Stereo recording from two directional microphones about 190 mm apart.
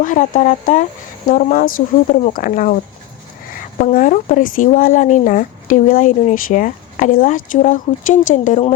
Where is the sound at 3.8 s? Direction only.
40° left (ahead or behind).